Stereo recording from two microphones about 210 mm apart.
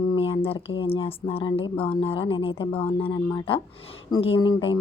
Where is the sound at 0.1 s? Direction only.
25° left (ahead or behind).